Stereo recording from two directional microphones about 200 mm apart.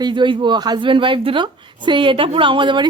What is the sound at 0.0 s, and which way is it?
A woman's voice, 25° right (ahead or behind).